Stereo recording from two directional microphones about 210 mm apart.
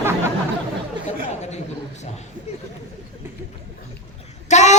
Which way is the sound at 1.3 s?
30° left (ahead or behind).